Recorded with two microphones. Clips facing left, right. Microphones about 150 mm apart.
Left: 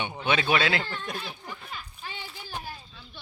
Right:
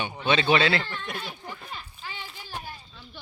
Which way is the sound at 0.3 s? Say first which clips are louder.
Right 4 dB; 5° left (ahead or behind).